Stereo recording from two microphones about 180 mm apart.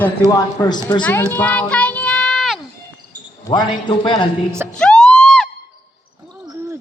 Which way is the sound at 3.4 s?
25° left (ahead or behind).